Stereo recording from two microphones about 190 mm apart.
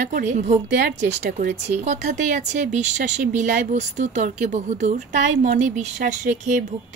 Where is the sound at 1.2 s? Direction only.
55° right (ahead or behind).